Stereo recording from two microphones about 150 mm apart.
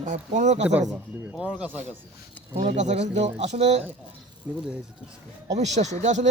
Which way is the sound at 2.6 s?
55° right (ahead or behind).